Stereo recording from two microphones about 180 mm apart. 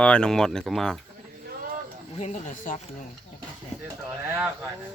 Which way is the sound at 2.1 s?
35° left (ahead or behind).